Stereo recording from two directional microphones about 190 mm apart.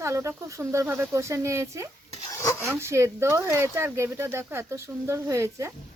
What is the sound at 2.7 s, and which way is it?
Speech, 15° right (ahead or behind).